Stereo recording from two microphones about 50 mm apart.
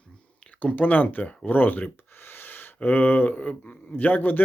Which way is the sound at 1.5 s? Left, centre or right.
Left.